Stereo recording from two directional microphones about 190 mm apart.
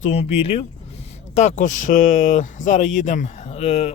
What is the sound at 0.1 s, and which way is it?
Speech, 35° left (ahead or behind).